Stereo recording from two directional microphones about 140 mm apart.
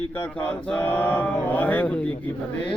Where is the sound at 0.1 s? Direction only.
15° left (ahead or behind).